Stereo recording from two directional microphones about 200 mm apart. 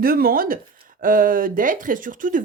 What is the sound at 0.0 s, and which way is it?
Speech, 45° right (ahead or behind).